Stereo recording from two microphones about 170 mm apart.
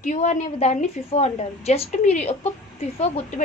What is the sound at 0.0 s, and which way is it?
A woman's voice, 45° left (ahead or behind).